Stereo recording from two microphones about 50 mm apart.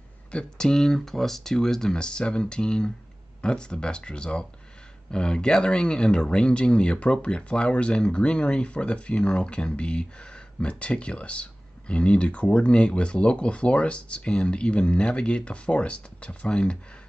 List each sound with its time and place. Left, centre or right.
0.3 s speech: centre